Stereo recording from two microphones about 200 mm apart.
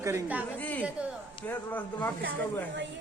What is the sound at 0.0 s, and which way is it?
Speech, 15° right (ahead or behind).